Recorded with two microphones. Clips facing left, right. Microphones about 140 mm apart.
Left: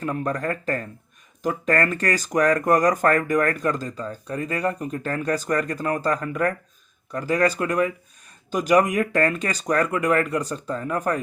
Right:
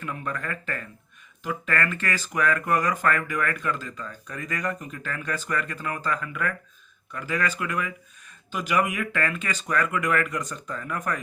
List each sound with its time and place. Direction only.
0.0 s speech: 40° left (ahead or behind)